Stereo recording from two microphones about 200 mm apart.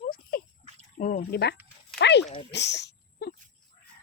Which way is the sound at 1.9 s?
60° left (ahead or behind).